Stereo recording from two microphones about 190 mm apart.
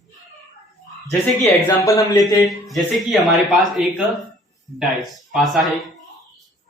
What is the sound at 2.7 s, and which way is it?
Speech, centre (ahead or behind).